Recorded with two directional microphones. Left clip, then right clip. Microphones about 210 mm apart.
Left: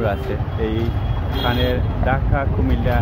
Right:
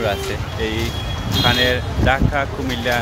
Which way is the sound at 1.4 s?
10° right (ahead or behind).